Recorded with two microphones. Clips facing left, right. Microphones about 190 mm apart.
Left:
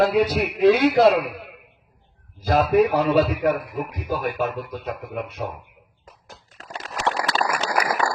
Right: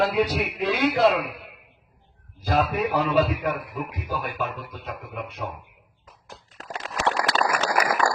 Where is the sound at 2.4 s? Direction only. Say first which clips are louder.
Left 6 dB; 45° left (ahead or behind).